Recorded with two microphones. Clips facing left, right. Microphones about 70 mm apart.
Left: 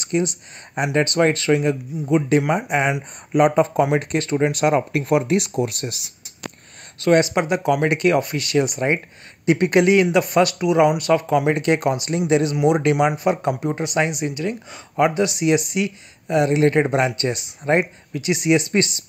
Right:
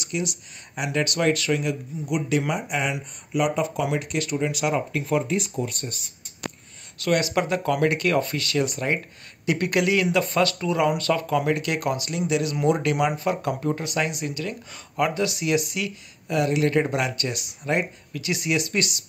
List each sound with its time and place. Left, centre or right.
0.0 s speech: left
7.0 s speech: left